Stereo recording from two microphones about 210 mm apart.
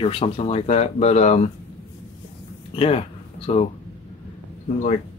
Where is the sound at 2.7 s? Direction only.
25° left (ahead or behind).